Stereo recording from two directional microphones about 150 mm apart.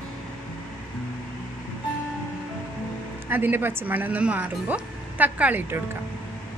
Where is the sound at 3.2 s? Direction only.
15° right (ahead or behind).